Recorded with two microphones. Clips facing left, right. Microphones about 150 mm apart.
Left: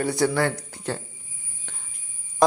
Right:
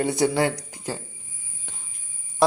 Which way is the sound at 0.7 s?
10° right (ahead or behind).